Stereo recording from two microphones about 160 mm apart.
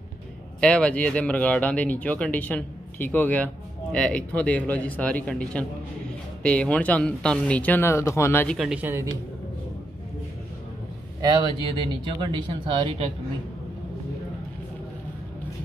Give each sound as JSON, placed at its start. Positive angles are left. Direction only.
{"t": 0.6, "sound": "speech", "side_deg": 5}
{"t": 8.5, "sound": "speech", "side_deg": -5}
{"t": 11.1, "sound": "a man's voice", "side_deg": -25}